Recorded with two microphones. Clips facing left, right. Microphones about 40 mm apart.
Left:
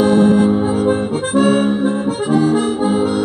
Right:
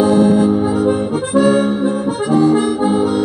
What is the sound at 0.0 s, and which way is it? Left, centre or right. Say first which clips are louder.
Music: even; left.